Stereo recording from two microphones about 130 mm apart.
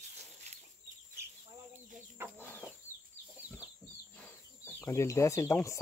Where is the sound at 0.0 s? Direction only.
60° right (ahead or behind).